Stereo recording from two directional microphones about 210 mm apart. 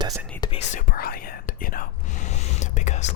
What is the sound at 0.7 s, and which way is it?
Whispering, 40° left (ahead or behind).